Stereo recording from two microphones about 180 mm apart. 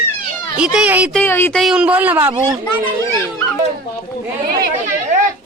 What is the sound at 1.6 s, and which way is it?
Speech, 5° right (ahead or behind).